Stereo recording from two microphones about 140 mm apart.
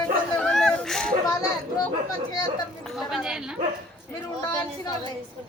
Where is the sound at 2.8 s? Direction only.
Centre (ahead or behind).